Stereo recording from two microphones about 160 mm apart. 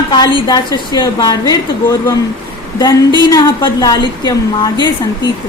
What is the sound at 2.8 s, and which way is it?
A woman's voice, 25° left (ahead or behind).